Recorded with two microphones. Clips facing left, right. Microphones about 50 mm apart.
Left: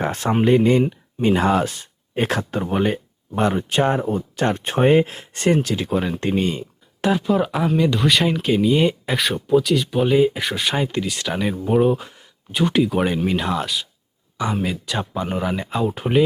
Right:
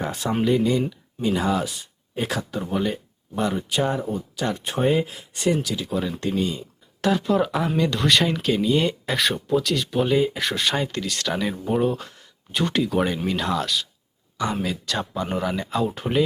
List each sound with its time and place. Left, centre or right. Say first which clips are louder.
0.0 s speech: left 4 dB; left
7.3 s speech: left 2 dB; centre